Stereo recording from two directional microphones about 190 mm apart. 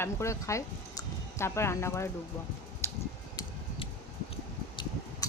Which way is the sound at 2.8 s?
15° left (ahead or behind).